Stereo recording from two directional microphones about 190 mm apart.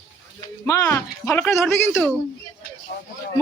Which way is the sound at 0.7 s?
15° left (ahead or behind).